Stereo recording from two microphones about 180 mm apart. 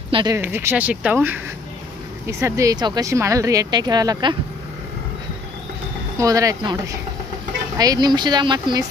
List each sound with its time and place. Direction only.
0.1 s speech: 25° right (ahead or behind)
0.4 s speech: 15° right (ahead or behind)
6.1 s speech: 20° right (ahead or behind)